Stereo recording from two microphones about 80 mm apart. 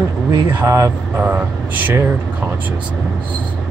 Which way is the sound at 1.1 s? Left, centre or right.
Right.